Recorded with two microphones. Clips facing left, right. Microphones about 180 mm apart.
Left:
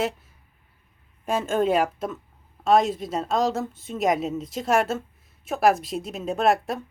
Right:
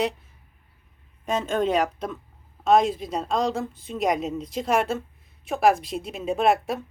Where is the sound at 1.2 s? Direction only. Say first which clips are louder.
Left 1 dB; 5° left (ahead or behind).